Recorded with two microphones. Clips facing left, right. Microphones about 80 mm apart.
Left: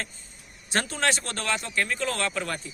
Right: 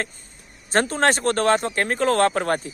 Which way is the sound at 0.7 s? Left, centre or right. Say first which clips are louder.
Right 7 dB; right.